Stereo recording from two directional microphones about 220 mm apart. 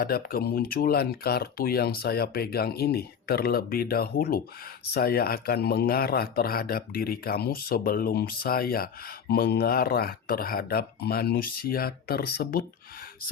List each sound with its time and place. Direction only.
0.0 s speech: 45° left (ahead or behind)